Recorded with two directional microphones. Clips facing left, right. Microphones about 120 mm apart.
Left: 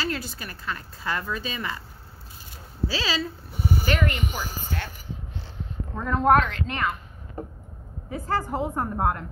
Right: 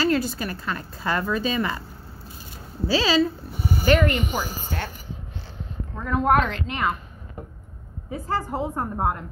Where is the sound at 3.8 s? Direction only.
50° right (ahead or behind).